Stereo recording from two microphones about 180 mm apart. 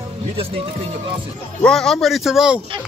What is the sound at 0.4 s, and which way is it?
Speech, 30° right (ahead or behind).